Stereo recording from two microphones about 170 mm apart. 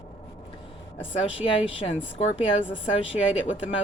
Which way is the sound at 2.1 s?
35° left (ahead or behind).